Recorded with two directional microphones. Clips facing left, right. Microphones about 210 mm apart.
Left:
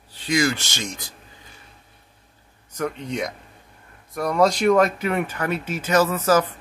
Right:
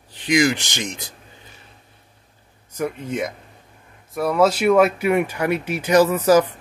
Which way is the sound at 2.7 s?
5° right (ahead or behind).